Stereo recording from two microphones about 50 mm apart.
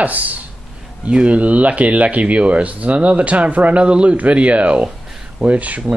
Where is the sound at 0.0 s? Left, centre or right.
Right.